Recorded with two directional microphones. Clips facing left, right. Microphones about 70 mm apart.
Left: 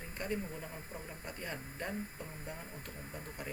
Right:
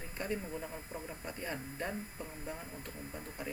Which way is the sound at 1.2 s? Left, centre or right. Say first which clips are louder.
Right 2 dB; centre.